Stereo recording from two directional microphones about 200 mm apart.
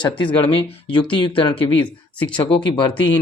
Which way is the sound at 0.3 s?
25° left (ahead or behind).